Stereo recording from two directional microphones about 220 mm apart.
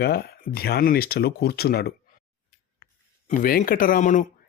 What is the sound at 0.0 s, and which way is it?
Speech, 45° left (ahead or behind).